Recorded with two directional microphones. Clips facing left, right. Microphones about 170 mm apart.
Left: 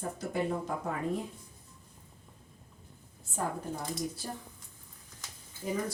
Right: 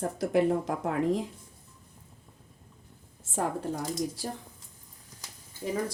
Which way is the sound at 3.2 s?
85° right.